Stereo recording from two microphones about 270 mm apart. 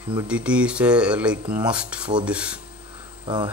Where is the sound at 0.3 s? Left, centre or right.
Centre.